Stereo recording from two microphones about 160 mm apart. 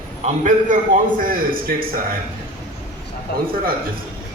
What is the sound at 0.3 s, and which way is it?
Speech, 50° right (ahead or behind).